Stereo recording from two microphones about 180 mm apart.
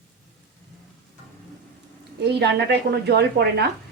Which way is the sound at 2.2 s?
70° right (ahead or behind).